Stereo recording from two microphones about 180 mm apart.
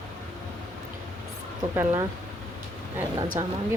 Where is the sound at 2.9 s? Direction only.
15° right (ahead or behind).